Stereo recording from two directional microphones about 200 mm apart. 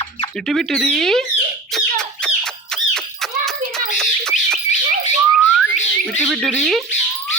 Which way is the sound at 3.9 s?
Centre (ahead or behind).